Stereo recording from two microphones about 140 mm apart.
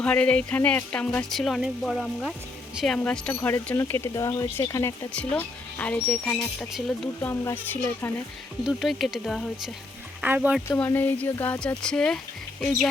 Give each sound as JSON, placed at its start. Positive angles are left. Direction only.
{"t": 0.0, "sound": "speech", "side_deg": 10}
{"t": 5.1, "sound": "speech", "side_deg": 10}
{"t": 8.6, "sound": "speech", "side_deg": 0}
{"t": 10.2, "sound": "speech", "side_deg": -10}
{"t": 10.7, "sound": "speech", "side_deg": 15}
{"t": 11.8, "sound": "speech", "side_deg": 5}